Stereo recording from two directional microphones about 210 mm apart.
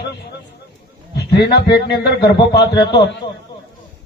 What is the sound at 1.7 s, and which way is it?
Speech, 50° left (ahead or behind).